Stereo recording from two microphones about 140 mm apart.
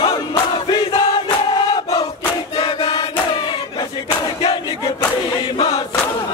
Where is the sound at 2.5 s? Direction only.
35° left (ahead or behind).